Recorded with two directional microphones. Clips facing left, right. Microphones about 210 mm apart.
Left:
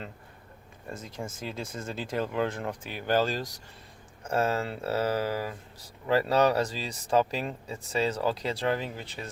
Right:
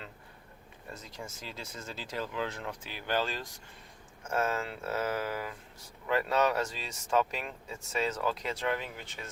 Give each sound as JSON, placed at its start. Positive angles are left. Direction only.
{"t": 0.9, "sound": "speech", "side_deg": 50}